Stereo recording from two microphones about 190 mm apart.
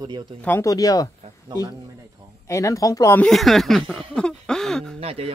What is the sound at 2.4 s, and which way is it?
Speech, 15° left (ahead or behind).